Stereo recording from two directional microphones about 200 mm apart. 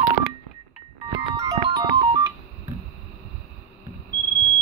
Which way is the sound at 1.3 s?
20° right (ahead or behind).